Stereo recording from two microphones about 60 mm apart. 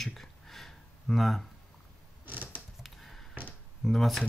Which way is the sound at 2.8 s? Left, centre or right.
Centre.